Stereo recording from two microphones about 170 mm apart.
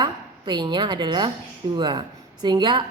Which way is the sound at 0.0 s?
25° right (ahead or behind).